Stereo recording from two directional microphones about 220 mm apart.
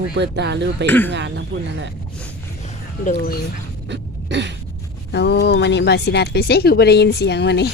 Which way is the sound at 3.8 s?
50° right (ahead or behind).